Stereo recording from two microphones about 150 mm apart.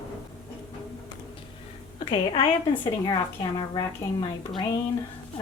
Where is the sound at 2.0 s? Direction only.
30° left (ahead or behind).